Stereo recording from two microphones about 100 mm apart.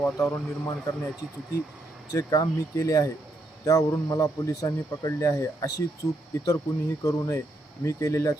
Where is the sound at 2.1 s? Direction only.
35° left (ahead or behind).